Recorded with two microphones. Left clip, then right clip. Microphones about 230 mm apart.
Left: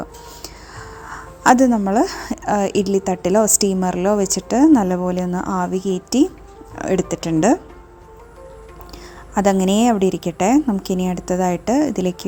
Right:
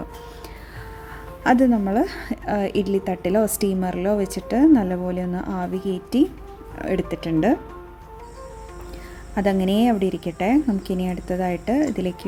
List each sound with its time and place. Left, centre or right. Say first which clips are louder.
1.1 s a woman's voice: left 6 dB; centre
9.3 s a woman's voice: left 5 dB; centre